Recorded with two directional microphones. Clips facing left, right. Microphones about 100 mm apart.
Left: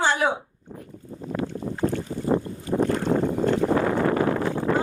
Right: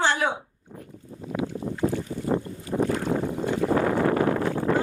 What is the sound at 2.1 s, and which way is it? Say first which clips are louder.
Boat: left 1 dB; 45° left (ahead or behind).